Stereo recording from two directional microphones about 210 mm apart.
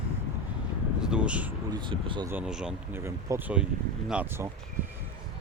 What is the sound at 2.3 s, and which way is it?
Speech, 5° right (ahead or behind).